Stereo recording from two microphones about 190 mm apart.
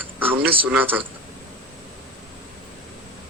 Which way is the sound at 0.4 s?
10° right (ahead or behind).